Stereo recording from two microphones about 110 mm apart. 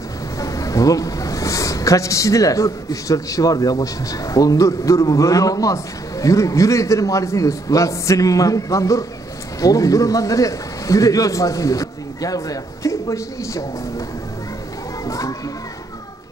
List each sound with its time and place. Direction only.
0.4 s speech: 30° left (ahead or behind)
15.0 s speech: 30° left (ahead or behind)